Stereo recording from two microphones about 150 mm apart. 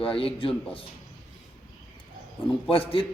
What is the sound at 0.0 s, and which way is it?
Speech, 35° left (ahead or behind).